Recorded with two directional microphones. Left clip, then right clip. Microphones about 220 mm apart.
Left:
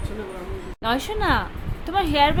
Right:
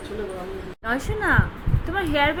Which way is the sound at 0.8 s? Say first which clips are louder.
Left 1 dB; 20° left (ahead or behind).